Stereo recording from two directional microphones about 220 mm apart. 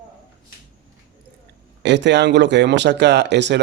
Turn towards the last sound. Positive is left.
turn(degrees=-50)  # may be behind; listen again after turning